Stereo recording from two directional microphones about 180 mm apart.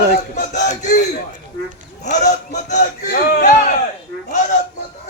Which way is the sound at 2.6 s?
45° left (ahead or behind).